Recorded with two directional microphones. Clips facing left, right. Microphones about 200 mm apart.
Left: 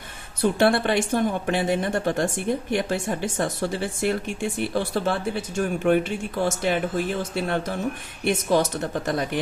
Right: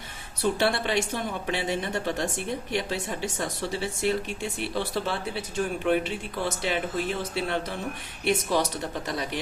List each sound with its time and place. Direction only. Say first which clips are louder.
0.6 s a woman's voice: left 8 dB; 50° left (ahead or behind)